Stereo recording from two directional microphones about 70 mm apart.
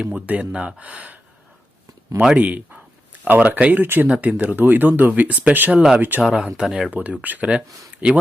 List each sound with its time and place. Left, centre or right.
0.0 s speech: centre
6.2 s speech: centre
6.9 s speech: right